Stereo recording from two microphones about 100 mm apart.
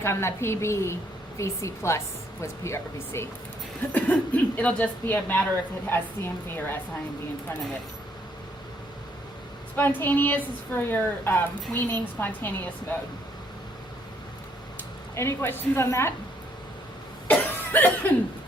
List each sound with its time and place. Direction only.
0.0 s speech: 25° left (ahead or behind)
3.9 s speech: 15° left (ahead or behind)
9.7 s speech: 20° left (ahead or behind)
14.8 s speech: 25° left (ahead or behind)
17.2 s cough: 20° left (ahead or behind)